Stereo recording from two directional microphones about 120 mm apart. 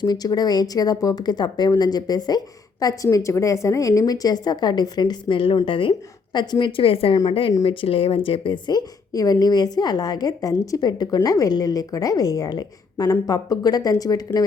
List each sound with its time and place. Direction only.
0.0 s a woman's voice: 35° left (ahead or behind)